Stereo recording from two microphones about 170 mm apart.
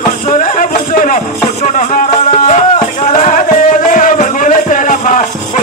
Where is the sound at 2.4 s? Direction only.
45° left (ahead or behind).